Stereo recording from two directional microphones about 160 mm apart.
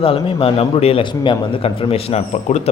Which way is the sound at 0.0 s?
35° left (ahead or behind).